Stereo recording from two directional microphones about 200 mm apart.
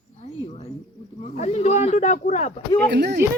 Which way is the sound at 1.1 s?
35° left (ahead or behind).